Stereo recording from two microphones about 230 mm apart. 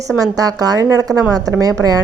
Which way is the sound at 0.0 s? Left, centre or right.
Centre.